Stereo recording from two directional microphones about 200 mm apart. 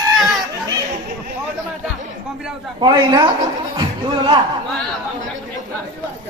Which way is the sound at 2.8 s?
20° right (ahead or behind).